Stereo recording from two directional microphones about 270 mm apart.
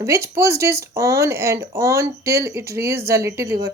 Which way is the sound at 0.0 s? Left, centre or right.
Centre.